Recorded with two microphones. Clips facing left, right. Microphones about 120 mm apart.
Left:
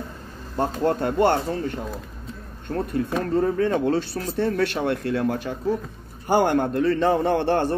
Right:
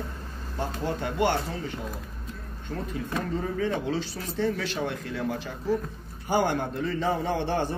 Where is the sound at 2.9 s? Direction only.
65° left (ahead or behind).